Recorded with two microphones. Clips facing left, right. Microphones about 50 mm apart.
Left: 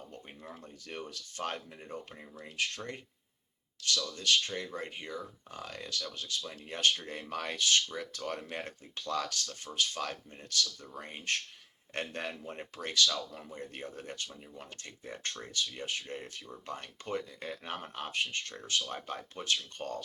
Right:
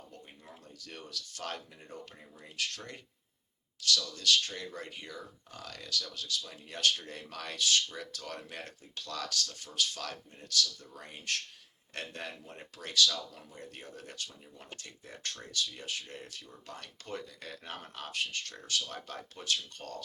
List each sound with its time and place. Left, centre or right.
0.4 s speech: left